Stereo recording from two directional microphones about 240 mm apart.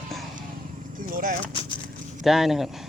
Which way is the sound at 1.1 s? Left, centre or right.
Right.